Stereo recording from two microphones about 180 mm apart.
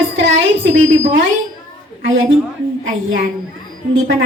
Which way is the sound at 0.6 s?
80° right.